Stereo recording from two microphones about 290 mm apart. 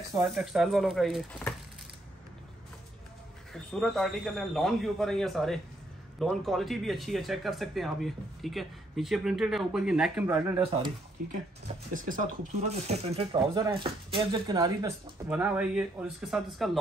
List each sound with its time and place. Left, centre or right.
0.2 s speech: centre
3.5 s speech: centre
11.9 s speech: right; by 16.7 s centre